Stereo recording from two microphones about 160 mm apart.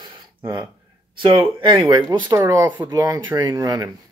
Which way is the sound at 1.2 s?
30° right (ahead or behind).